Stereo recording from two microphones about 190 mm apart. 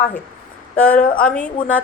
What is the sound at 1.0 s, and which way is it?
Speech, 50° left (ahead or behind).